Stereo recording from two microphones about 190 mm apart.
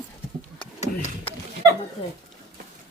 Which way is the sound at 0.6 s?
30° left (ahead or behind).